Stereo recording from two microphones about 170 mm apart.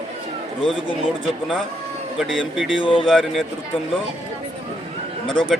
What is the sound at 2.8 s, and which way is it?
Speech, 30° left (ahead or behind).